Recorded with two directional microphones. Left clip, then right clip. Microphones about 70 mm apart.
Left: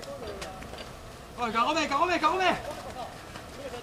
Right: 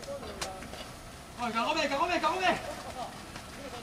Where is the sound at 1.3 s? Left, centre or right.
Left.